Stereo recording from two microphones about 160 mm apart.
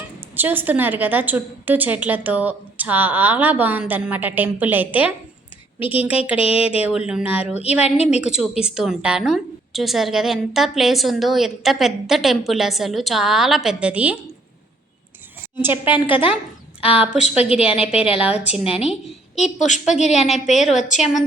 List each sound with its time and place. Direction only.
0.3 s a woman's voice: 10° right (ahead or behind)
6.3 s a woman's voice: 35° left (ahead or behind)
7.1 s a woman's voice: 5° right (ahead or behind)
15.6 s a woman's voice: 10° right (ahead or behind)
16.0 s a woman's voice: 35° left (ahead or behind)
19.4 s a woman's voice: 50° left (ahead or behind)